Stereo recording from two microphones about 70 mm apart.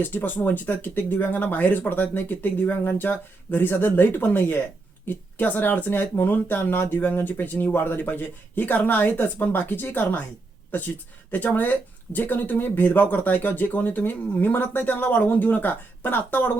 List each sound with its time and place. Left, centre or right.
0.0 s speech: left